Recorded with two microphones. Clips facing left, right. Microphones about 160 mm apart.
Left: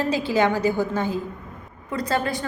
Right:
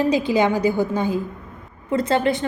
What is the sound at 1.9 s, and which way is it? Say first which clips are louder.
Speech: right 5 dB; 25° right (ahead or behind).